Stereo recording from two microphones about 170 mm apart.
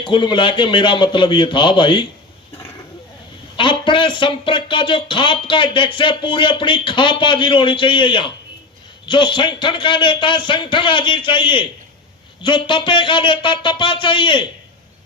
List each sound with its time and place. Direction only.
0.0 s speech: 25° left (ahead or behind)
3.6 s speech: 30° left (ahead or behind)